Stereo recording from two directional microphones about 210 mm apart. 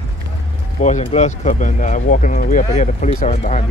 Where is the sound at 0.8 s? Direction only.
35° left (ahead or behind).